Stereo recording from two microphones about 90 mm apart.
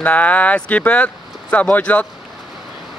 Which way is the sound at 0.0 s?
15° left (ahead or behind).